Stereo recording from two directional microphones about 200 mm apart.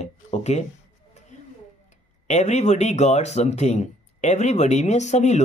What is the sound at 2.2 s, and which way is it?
Speech, 35° left (ahead or behind).